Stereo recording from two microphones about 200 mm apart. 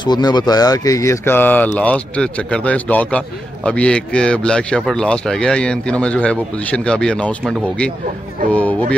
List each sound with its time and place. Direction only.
0.0 s a man's voice: 20° left (ahead or behind)